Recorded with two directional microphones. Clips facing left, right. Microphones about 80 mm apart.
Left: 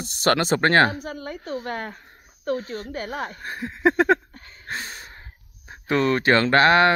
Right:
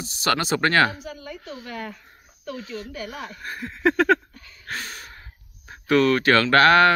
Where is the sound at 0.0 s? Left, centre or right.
Left.